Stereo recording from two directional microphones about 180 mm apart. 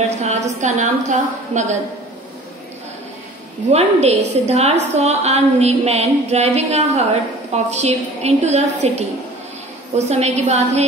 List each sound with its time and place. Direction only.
0.2 s a woman's voice: 40° right (ahead or behind)
3.7 s a woman's voice: 35° right (ahead or behind)